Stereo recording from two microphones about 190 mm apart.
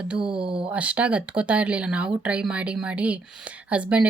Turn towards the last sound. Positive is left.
turn(degrees=-5)  # may be behind; listen again after turning